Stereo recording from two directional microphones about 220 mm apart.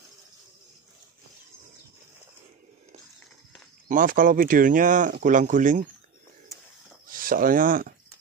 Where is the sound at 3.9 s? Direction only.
40° right (ahead or behind).